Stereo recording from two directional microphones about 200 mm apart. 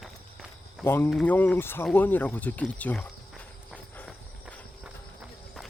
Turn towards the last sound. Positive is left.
turn(degrees=5)  # may be behind; listen again after turning